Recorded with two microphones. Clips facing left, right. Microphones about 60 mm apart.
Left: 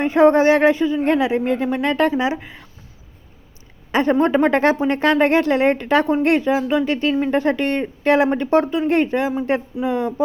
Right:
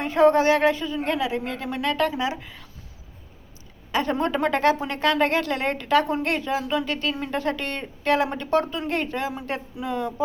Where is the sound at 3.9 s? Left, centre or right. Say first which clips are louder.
Left 7 dB; left.